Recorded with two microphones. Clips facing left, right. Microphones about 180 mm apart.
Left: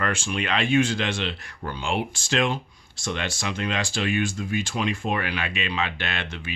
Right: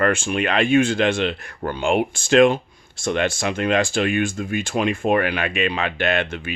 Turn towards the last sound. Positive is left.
turn(degrees=-50)  # may be behind; listen again after turning